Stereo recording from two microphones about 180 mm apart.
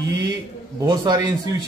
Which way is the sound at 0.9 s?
25° right (ahead or behind).